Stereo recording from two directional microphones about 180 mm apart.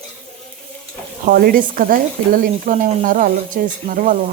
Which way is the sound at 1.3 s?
55° right (ahead or behind).